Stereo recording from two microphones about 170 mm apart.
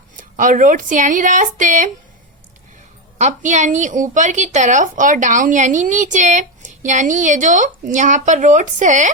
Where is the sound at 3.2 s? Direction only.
45° right (ahead or behind).